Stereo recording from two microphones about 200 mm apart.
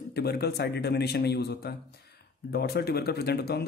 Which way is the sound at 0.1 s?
55° left (ahead or behind).